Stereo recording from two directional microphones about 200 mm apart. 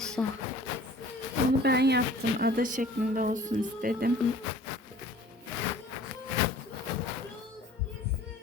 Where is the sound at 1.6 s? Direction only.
55° right (ahead or behind).